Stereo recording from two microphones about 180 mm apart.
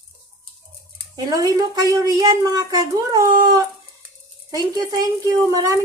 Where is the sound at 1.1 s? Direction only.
20° right (ahead or behind).